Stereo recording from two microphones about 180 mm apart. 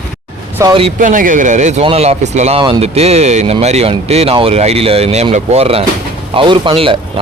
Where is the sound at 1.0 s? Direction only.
45° right (ahead or behind).